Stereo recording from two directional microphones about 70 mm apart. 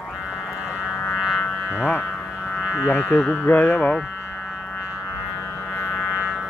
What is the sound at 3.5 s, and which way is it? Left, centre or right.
Speech, left.